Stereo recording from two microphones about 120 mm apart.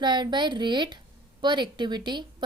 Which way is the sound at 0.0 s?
40° right (ahead or behind).